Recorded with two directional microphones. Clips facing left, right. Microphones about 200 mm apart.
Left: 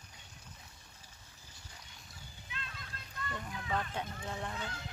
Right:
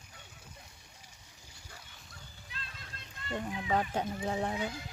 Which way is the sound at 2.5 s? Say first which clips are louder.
Left 2 dB; 35° right (ahead or behind).